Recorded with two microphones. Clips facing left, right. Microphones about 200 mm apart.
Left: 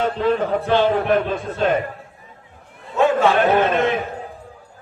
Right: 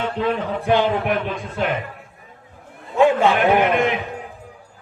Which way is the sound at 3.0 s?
15° right (ahead or behind).